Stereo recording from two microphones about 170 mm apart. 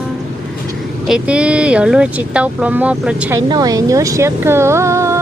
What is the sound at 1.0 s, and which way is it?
Speech, 5° right (ahead or behind).